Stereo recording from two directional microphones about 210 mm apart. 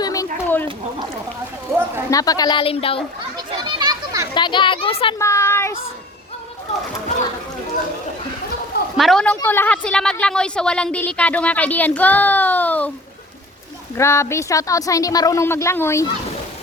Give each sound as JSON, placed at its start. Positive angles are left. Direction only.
{"t": 0.0, "sound": "a sound", "side_deg": 15}
{"t": 2.0, "sound": "a woman's voice", "side_deg": 15}
{"t": 3.3, "sound": "children playing", "side_deg": -20}
{"t": 4.4, "sound": "a woman's voice", "side_deg": 20}
{"t": 5.2, "sound": "a sound", "side_deg": 15}
{"t": 9.0, "sound": "a woman's voice", "side_deg": 0}
{"t": 13.9, "sound": "a woman's voice", "side_deg": 15}